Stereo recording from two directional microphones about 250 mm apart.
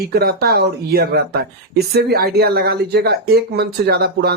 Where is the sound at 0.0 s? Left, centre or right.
Right.